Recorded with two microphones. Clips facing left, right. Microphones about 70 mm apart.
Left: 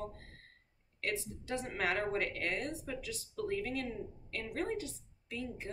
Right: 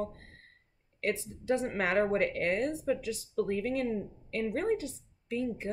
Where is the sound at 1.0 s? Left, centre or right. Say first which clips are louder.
Right 6 dB; right.